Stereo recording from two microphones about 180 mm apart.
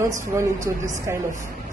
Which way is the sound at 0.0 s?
15° right (ahead or behind).